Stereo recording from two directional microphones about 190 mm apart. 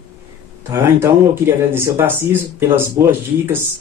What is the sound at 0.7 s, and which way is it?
Speech, 15° right (ahead or behind).